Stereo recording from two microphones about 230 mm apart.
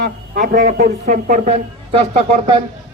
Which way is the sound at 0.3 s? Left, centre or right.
Right.